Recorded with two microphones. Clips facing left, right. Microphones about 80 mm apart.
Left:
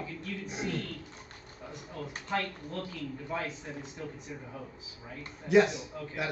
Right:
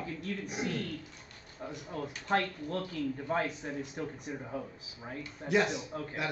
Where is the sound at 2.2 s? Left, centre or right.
Right.